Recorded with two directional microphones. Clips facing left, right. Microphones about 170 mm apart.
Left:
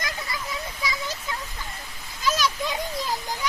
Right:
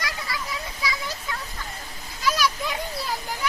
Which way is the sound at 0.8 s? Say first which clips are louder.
Right 2 dB; 20° left (ahead or behind).